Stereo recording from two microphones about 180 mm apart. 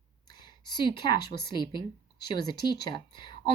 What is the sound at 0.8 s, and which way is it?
A woman's voice, 25° left (ahead or behind).